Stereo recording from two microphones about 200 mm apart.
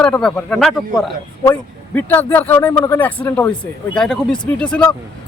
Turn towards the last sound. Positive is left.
turn(degrees=5)  # may be behind; listen again after turning